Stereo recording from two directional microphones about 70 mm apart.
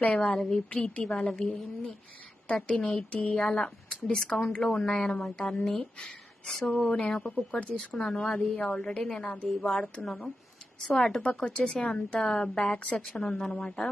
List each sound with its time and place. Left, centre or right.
0.0 s a woman's voice: centre
6.8 s a woman's voice: left
13.0 s a woman's voice: centre